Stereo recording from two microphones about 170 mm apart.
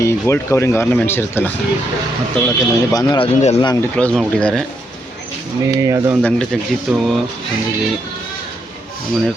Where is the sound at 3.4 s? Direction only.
40° left (ahead or behind).